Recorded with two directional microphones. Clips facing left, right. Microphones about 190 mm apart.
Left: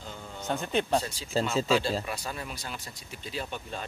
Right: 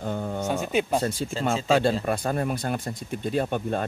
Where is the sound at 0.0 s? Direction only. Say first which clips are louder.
Right 13 dB; 55° right (ahead or behind).